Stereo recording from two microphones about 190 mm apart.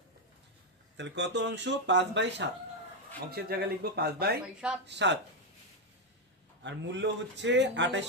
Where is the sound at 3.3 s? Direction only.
55° right (ahead or behind).